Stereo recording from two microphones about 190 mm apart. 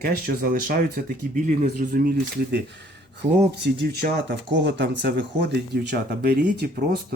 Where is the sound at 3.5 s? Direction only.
65° right (ahead or behind).